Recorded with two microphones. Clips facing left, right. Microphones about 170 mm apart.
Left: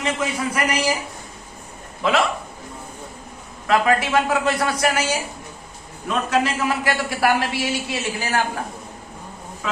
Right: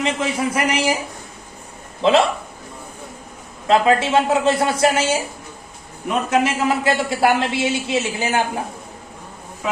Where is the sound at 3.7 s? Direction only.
25° right (ahead or behind).